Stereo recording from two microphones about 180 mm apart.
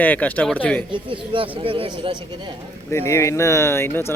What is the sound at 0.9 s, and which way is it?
Speech, 30° right (ahead or behind).